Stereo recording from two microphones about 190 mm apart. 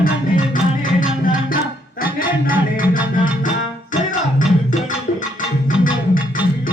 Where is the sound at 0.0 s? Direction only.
45° left (ahead or behind).